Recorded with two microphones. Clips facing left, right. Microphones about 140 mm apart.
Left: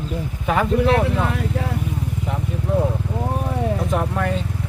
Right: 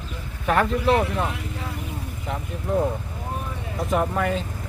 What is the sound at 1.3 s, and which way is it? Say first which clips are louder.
Speech: left 8 dB; 65° left (ahead or behind).